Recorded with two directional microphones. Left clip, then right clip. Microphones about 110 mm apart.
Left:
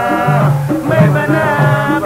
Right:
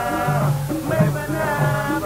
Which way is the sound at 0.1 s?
25° left (ahead or behind).